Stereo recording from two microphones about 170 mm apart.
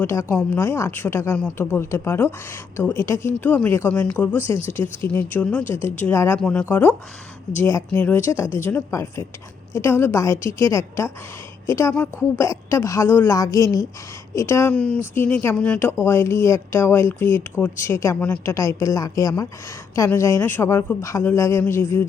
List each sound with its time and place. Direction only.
0.0 s a woman's voice: 15° left (ahead or behind)